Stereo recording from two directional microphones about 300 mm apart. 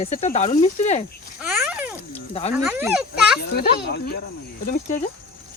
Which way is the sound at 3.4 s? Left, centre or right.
Left.